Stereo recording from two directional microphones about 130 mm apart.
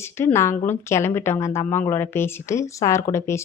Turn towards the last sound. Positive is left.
turn(degrees=20)  # may be behind; listen again after turning